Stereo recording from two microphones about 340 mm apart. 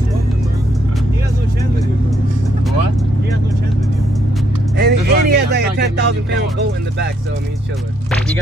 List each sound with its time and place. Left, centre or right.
4.7 s music: right